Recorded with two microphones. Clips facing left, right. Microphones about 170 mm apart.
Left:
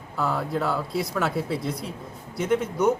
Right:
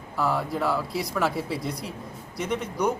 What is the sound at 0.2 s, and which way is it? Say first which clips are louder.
Speech: even; centre (ahead or behind).